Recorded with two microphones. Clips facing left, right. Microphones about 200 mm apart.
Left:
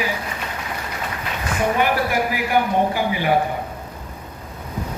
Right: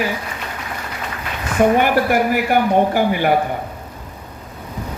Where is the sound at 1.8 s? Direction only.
55° right (ahead or behind).